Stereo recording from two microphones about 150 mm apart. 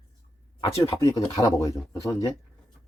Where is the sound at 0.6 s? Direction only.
35° left (ahead or behind).